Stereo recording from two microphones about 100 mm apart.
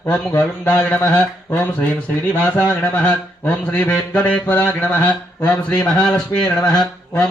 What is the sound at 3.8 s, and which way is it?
Music, 15° left (ahead or behind).